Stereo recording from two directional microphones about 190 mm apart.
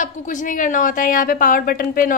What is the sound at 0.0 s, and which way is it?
A woman's voice, 40° left (ahead or behind).